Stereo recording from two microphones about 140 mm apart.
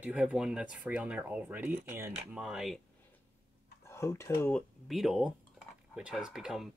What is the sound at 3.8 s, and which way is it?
Speech, 20° left (ahead or behind).